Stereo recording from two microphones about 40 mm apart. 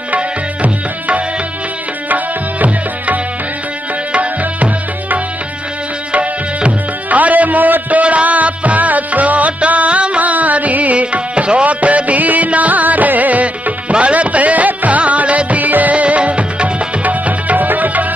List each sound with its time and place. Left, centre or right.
0.1 s music: right
7.1 s music: right